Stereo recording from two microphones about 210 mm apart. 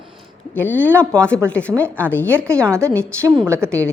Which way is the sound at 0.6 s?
10° left (ahead or behind).